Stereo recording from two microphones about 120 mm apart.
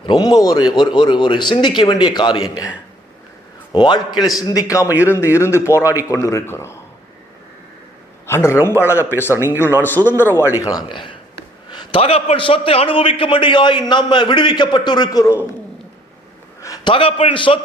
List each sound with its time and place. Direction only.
0.0 s a man's voice: 40° left (ahead or behind); by 6.7 s 20° left (ahead or behind)
8.3 s a man's voice: 20° left (ahead or behind)
10.6 s a man's voice: 30° left (ahead or behind)
11.9 s a man's voice: 55° left (ahead or behind); by 15.4 s 30° left (ahead or behind)
16.6 s a sound: 25° left (ahead or behind)
16.8 s a man's voice: 50° left (ahead or behind)